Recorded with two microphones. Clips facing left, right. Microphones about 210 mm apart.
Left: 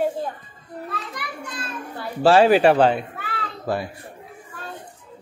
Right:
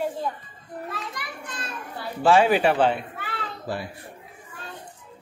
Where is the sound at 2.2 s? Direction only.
35° left (ahead or behind).